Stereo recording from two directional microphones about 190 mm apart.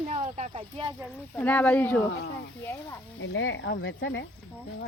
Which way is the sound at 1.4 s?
10° left (ahead or behind).